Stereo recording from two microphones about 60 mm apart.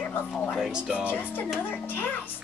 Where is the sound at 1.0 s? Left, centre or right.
Left.